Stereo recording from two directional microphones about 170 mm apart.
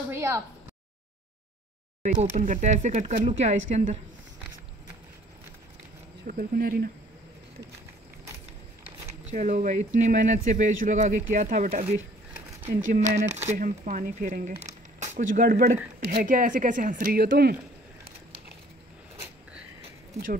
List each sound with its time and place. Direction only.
0.1 s speech: 15° right (ahead or behind)
2.0 s a woman's voice: 50° right (ahead or behind)
6.2 s speech: 60° right (ahead or behind)
9.3 s speech: 45° right (ahead or behind); by 17.6 s 65° right (ahead or behind)